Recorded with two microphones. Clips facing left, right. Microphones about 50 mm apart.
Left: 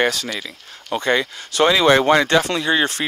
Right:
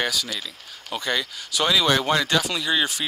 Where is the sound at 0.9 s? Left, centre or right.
Left.